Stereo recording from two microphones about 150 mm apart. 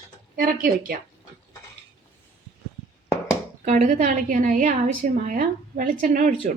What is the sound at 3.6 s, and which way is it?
A woman's voice, 55° right (ahead or behind).